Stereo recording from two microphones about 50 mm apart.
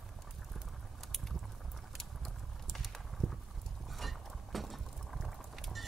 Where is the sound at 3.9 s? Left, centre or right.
Centre.